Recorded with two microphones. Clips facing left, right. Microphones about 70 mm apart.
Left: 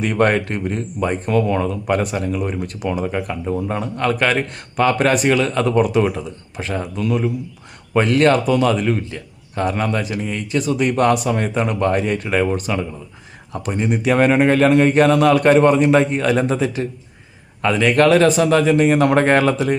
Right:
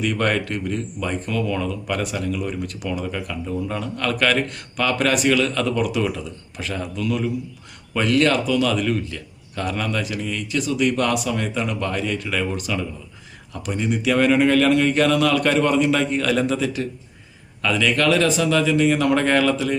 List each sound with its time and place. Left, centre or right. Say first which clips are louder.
0.0 s speech: left 5 dB; left